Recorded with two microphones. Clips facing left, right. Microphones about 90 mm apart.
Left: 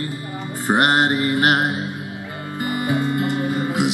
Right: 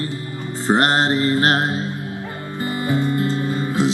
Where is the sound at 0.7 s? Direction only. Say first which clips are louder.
Even; 15° left (ahead or behind).